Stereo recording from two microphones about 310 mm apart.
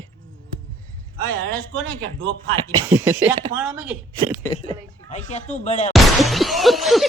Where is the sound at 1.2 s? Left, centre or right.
Right.